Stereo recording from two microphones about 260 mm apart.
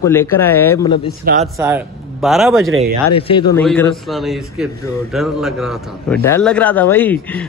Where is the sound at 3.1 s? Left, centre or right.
Left.